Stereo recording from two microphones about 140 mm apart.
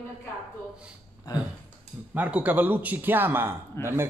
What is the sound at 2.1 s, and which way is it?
Speech, 10° right (ahead or behind).